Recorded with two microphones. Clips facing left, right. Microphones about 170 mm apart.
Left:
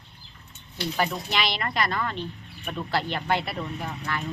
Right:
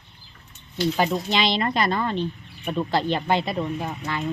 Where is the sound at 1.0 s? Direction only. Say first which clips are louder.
Right 3 dB; 25° right (ahead or behind).